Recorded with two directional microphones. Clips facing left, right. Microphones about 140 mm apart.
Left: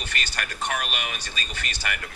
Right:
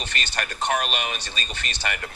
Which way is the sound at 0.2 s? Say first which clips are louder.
Right 4 dB; 30° right (ahead or behind).